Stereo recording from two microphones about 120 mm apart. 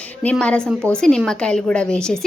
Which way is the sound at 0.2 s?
10° left (ahead or behind).